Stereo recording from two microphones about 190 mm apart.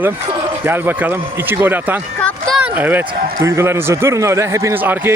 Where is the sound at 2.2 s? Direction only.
Centre (ahead or behind).